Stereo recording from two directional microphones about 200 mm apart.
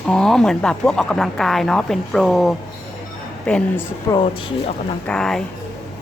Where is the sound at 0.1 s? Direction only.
5° left (ahead or behind).